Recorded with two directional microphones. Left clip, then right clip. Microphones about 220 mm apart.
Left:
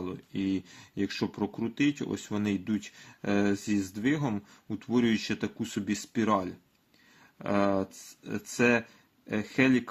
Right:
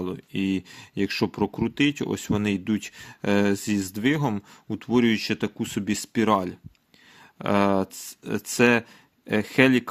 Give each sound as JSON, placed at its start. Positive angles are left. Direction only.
{"t": 0.0, "sound": "speech", "side_deg": -35}